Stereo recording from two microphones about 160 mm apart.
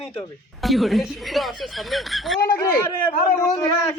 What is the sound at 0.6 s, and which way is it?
Speech, centre (ahead or behind).